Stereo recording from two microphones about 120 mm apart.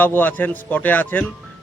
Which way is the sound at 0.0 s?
15° left (ahead or behind).